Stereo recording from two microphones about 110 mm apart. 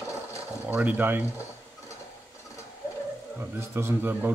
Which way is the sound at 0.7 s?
15° right (ahead or behind).